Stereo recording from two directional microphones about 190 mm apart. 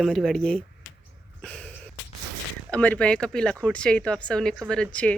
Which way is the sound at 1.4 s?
5° left (ahead or behind).